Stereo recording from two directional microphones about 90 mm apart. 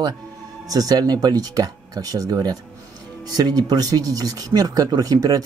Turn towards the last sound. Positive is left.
turn(degrees=-45)  # may be behind; listen again after turning